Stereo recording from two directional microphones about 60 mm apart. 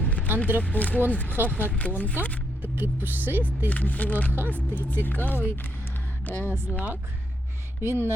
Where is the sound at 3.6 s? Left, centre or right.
Left.